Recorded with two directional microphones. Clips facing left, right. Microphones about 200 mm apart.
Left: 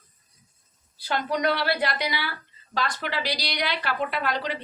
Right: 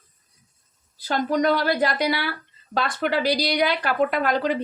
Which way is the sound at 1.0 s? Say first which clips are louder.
Right 4 dB; 45° right (ahead or behind).